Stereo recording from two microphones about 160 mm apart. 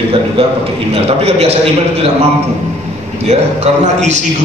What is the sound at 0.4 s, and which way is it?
A man's voice, 35° right (ahead or behind).